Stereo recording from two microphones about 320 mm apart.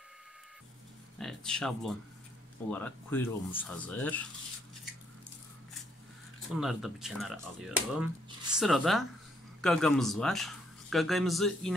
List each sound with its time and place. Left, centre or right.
1.1 s a sound: centre
2.7 s speech: centre
6.5 s speech: centre